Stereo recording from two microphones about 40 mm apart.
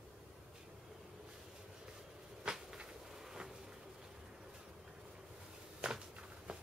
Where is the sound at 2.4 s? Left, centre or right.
Centre.